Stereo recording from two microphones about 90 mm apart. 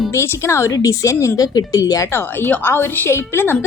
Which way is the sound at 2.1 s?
25° left (ahead or behind).